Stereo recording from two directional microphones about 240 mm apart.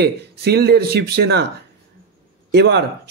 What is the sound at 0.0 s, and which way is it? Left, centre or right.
Speech, right.